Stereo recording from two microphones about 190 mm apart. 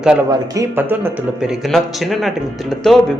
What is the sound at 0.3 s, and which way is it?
Speech, 15° right (ahead or behind).